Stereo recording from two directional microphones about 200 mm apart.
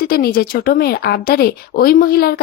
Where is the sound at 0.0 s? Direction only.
50° left (ahead or behind).